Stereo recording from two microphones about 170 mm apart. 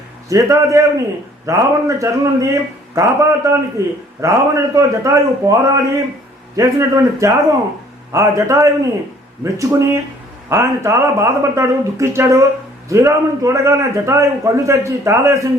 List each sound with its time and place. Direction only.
0.3 s a man's voice: 20° right (ahead or behind)